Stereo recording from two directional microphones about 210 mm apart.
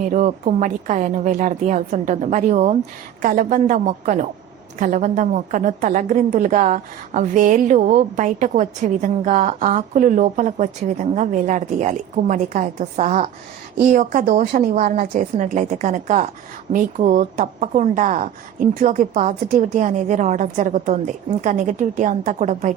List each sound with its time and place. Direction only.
0.1 s a woman's voice: 35° right (ahead or behind)